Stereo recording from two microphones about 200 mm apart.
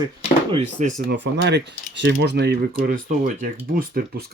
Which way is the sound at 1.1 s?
60° right (ahead or behind).